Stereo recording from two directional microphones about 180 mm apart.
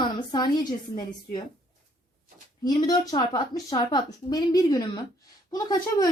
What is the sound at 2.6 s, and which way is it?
A woman's voice, 20° left (ahead or behind).